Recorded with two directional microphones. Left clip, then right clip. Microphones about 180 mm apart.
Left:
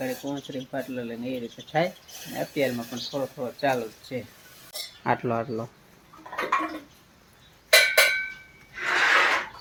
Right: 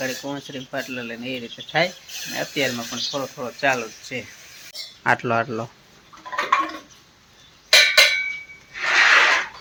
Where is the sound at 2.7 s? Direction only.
15° right (ahead or behind).